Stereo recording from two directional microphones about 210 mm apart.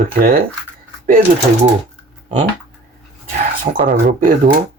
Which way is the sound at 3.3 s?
45° right (ahead or behind).